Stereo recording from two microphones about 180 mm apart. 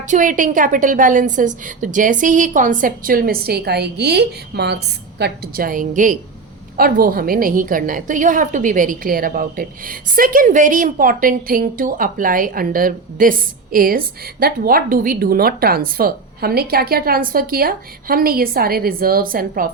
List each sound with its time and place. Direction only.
0.0 s a woman's voice: 45° right (ahead or behind)